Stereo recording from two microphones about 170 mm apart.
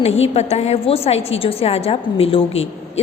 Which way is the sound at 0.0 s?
35° left (ahead or behind).